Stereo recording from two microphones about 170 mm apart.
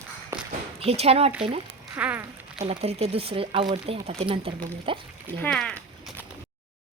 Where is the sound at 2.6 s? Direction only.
35° right (ahead or behind).